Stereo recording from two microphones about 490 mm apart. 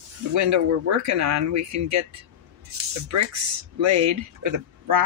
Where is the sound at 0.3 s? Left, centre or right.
Right.